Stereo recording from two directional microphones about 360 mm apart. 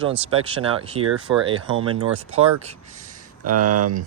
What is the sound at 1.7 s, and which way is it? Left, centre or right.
Speech, right.